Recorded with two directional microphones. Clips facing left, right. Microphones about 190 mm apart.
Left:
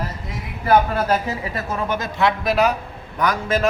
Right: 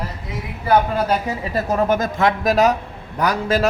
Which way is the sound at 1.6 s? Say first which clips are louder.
Right 7 dB; 45° right (ahead or behind).